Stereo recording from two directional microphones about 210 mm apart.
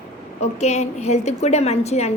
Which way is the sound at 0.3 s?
30° left (ahead or behind).